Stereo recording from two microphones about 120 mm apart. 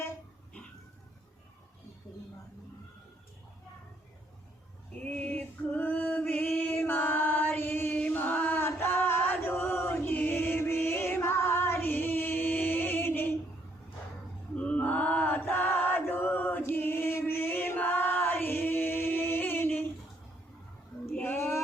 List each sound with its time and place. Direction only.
5.0 s music: 15° left (ahead or behind)
14.5 s male singing: 10° left (ahead or behind)
21.2 s female singing: 20° left (ahead or behind)